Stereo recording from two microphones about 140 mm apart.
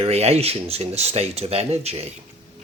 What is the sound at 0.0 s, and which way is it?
Speech, 50° right (ahead or behind).